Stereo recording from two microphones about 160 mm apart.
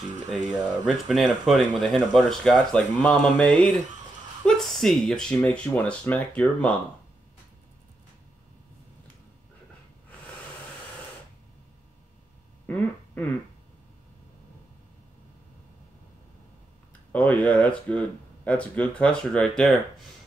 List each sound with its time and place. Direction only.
0.8 s speech: centre (ahead or behind)
12.6 s a sound: 10° left (ahead or behind)
17.1 s speech: 10° left (ahead or behind)